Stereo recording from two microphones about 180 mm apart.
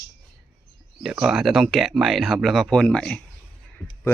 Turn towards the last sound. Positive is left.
turn(degrees=5)  # may be behind; listen again after turning